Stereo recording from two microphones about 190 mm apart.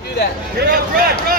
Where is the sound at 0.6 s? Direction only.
55° right (ahead or behind).